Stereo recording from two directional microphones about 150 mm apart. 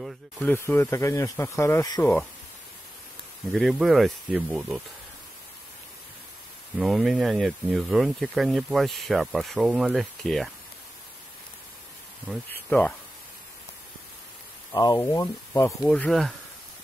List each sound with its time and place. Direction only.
0.4 s speech: 15° left (ahead or behind)
3.7 s speech: centre (ahead or behind)
6.8 s speech: centre (ahead or behind)
12.6 s speech: 10° left (ahead or behind)
14.7 s speech: 25° left (ahead or behind)
15.8 s speech: 5° left (ahead or behind)